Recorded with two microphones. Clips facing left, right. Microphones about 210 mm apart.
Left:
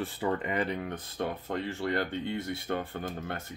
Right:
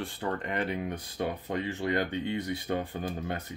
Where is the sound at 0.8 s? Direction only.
15° right (ahead or behind).